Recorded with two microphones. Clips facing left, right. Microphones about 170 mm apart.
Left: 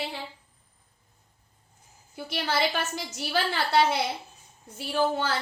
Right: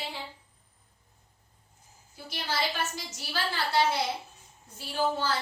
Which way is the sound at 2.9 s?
65° left (ahead or behind).